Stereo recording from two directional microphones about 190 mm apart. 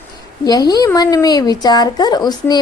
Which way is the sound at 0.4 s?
20° left (ahead or behind).